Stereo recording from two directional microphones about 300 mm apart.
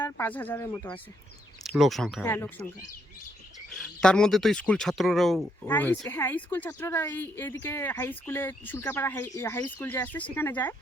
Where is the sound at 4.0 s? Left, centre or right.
Centre.